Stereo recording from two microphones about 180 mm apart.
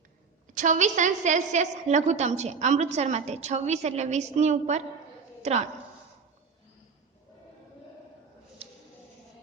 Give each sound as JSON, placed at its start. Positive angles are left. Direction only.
{"t": 0.4, "sound": "a woman's voice", "side_deg": -45}